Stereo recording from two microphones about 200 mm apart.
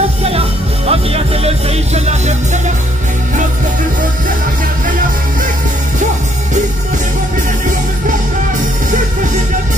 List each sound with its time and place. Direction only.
0.2 s music: 30° right (ahead or behind)